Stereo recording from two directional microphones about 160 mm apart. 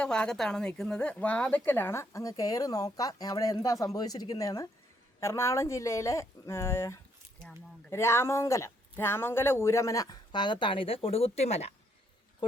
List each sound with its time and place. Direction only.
0.0 s speech: 5° left (ahead or behind); by 11.7 s 40° left (ahead or behind)